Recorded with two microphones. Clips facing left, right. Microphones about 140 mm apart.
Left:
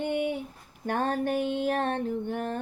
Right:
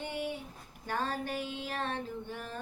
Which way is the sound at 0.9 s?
55° left (ahead or behind).